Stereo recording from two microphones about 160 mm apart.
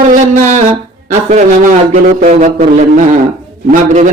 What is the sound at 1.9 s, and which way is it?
Speech, 50° right (ahead or behind).